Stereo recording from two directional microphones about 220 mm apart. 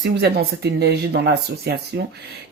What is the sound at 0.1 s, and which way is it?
Speech, 50° right (ahead or behind).